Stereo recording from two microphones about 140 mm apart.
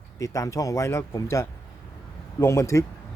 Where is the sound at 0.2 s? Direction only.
25° left (ahead or behind).